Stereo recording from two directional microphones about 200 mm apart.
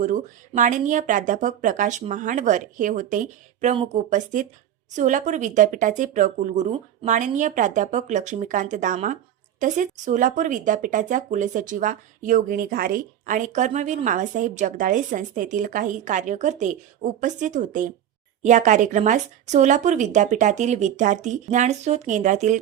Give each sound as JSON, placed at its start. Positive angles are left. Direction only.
{"t": 0.0, "sound": "speech", "side_deg": -40}